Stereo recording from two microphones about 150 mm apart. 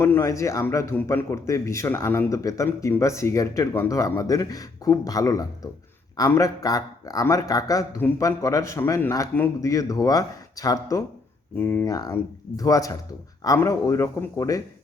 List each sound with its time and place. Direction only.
0.0 s a man's voice: 15° left (ahead or behind)
11.9 s a man's voice: 25° left (ahead or behind)